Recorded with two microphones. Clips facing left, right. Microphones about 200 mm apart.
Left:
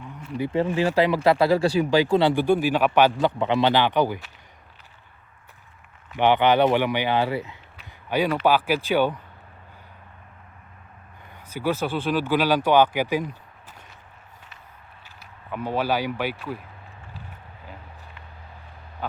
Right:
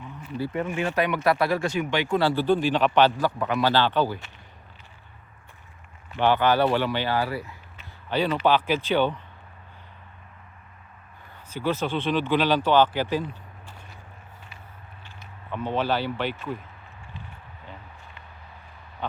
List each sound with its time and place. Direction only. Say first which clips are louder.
0.3 s speech: left 4 dB; 20° left (ahead or behind)
0.6 s speech: left 5 dB; 30° left (ahead or behind)
2.2 s speech: left 2 dB; 15° left (ahead or behind)
3.2 s speech: left 3 dB; 25° left (ahead or behind)
6.1 s speech: left 2 dB; 20° left (ahead or behind)
8.1 s speech: left 1 dB; 10° left (ahead or behind)
11.4 s speech: left 1 dB; 10° left (ahead or behind)
15.4 s speech: left 1 dB; 10° left (ahead or behind)